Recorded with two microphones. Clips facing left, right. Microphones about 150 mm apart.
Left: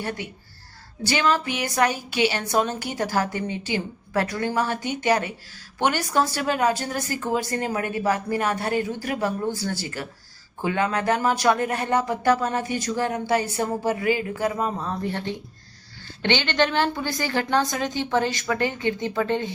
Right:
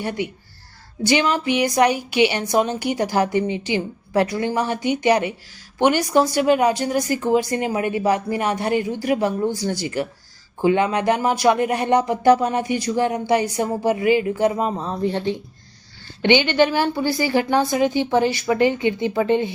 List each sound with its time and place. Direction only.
0.0 s speech: 15° right (ahead or behind)